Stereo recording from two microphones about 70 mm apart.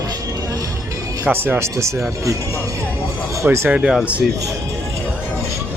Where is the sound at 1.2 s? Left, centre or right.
Right.